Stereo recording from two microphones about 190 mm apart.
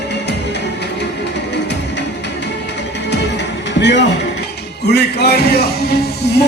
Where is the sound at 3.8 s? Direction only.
65° left (ahead or behind).